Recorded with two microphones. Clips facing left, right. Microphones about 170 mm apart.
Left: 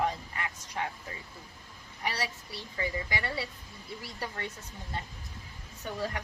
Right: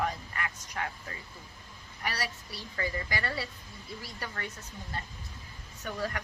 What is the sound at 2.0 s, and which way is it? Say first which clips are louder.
Speech: left 1 dB; 20° left (ahead or behind).